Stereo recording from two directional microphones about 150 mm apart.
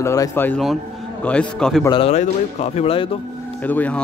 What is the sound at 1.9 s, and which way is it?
A man's voice, 40° left (ahead or behind).